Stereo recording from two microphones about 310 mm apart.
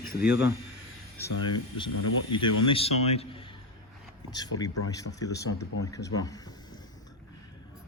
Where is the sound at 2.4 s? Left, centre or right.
Left.